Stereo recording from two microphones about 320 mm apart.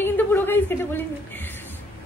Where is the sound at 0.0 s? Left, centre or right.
Centre.